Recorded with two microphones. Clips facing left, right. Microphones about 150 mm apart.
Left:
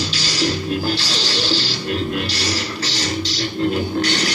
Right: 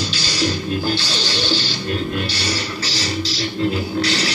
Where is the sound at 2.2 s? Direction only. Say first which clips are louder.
Even; 30° right (ahead or behind).